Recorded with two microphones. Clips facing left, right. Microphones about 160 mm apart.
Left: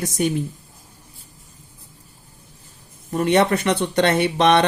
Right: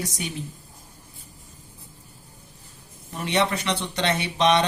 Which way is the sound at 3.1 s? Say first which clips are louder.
Left 7 dB; 50° left (ahead or behind).